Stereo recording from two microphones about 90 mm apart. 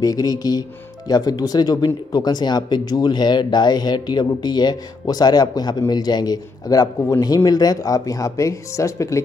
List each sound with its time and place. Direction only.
0.0 s speech: 45° left (ahead or behind)